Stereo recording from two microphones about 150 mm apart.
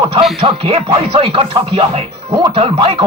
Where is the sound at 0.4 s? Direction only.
40° right (ahead or behind).